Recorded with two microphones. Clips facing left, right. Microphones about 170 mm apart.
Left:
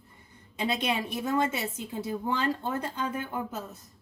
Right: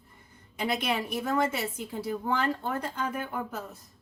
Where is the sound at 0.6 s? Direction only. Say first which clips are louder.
Even; 25° left (ahead or behind).